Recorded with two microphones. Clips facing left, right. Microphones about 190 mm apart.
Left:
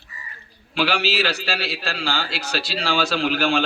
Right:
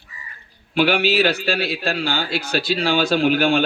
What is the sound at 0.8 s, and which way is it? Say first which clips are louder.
A man's voice: right 5 dB; 55° right (ahead or behind).